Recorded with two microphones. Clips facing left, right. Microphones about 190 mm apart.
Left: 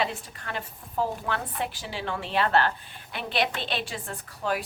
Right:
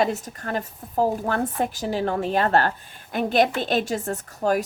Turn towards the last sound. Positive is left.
turn(degrees=-45)  # may be behind; listen again after turning